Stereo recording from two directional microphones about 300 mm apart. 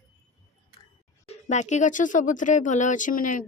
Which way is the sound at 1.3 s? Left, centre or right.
Left.